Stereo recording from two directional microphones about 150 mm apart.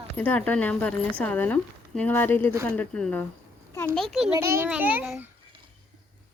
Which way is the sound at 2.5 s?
15° right (ahead or behind).